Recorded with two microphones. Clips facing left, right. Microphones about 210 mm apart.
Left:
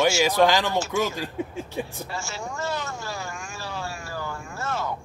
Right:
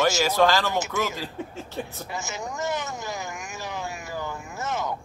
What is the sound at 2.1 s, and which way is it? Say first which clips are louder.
Vehicle: right 1 dB; 20° right (ahead or behind).